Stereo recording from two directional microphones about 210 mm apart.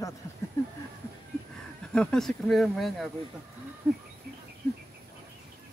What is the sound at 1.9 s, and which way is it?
Speech, 5° left (ahead or behind).